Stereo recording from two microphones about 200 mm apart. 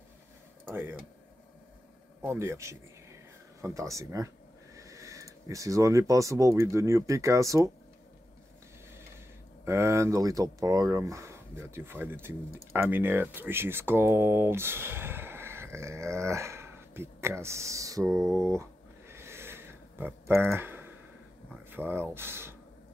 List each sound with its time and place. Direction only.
0.7 s speech: 10° right (ahead or behind)
2.2 s speech: 15° right (ahead or behind)
9.7 s speech: 15° right (ahead or behind)